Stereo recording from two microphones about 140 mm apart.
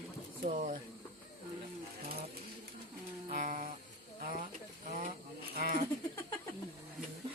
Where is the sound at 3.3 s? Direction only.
70° right (ahead or behind).